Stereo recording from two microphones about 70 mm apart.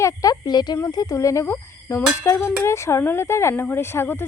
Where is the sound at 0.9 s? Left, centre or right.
Left.